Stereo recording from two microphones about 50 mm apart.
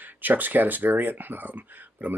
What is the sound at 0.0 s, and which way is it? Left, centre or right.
Speech, right.